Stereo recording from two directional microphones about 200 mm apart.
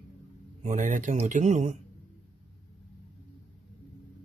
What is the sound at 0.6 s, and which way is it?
Speech, 35° right (ahead or behind).